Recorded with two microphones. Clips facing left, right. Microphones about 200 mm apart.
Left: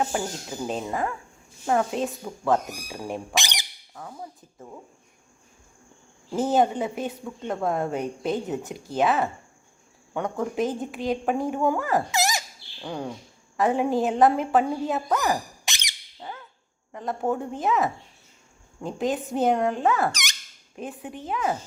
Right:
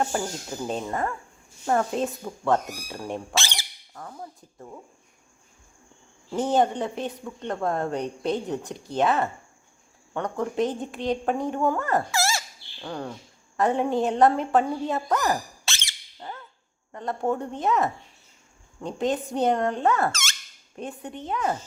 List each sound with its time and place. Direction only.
0.0 s a woman's voice: 5° left (ahead or behind)
3.3 s speech: 15° left (ahead or behind)
3.9 s a woman's voice: 5° left (ahead or behind)
6.3 s a woman's voice: 5° left (ahead or behind)
12.1 s bird: 15° left (ahead or behind)
13.6 s a woman's voice: 5° left (ahead or behind)
15.6 s squeak: 15° left (ahead or behind)
16.2 s a sound: 5° left (ahead or behind)
16.9 s a woman's voice: centre (ahead or behind)
20.1 s speech: 15° left (ahead or behind)
20.7 s a woman's voice: centre (ahead or behind)